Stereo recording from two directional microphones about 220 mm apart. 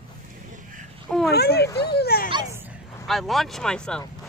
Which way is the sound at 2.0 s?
45° left (ahead or behind).